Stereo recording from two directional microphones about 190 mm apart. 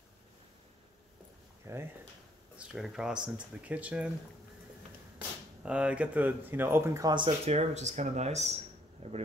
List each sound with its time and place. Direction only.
1.7 s speech: 15° right (ahead or behind)
2.5 s speech: 5° right (ahead or behind)
5.6 s speech: 5° right (ahead or behind); by 9.2 s 35° right (ahead or behind)